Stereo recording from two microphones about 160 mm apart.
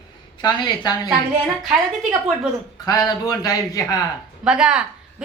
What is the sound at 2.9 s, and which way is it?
A man's voice, 25° left (ahead or behind).